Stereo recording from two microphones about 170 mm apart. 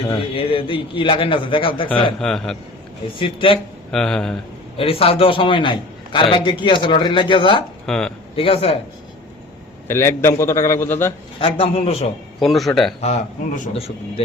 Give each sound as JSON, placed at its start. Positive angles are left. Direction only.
{"t": 0.1, "sound": "a man's voice", "side_deg": 30}
{"t": 2.1, "sound": "a man's voice", "side_deg": 5}
{"t": 3.2, "sound": "a man's voice", "side_deg": 30}
{"t": 3.9, "sound": "a man's voice", "side_deg": 5}
{"t": 4.8, "sound": "a man's voice", "side_deg": 35}
{"t": 7.9, "sound": "a man's voice", "side_deg": 5}
{"t": 8.4, "sound": "a man's voice", "side_deg": 35}
{"t": 9.8, "sound": "a man's voice", "side_deg": 15}
{"t": 11.3, "sound": "a man's voice", "side_deg": 30}
{"t": 12.4, "sound": "a man's voice", "side_deg": 0}
{"t": 13.0, "sound": "a man's voice", "side_deg": 40}